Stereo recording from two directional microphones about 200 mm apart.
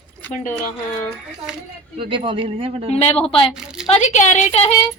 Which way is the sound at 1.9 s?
25° right (ahead or behind).